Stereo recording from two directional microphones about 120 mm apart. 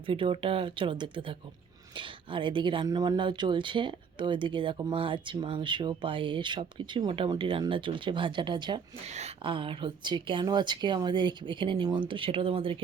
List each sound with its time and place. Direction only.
0.0 s speech: 45° right (ahead or behind)
9.0 s speech: 65° right (ahead or behind)
9.4 s speech: 45° right (ahead or behind)